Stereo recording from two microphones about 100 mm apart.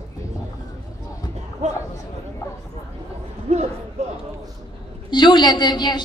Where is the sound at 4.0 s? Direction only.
90° right.